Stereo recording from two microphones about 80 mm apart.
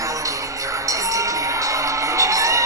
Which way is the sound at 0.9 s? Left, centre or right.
Right.